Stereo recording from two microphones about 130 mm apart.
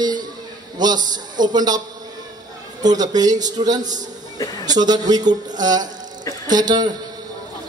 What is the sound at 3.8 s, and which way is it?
Speech, 70° right (ahead or behind).